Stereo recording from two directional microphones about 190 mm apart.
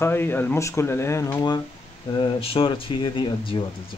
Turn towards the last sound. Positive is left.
turn(degrees=25)  # may be behind; listen again after turning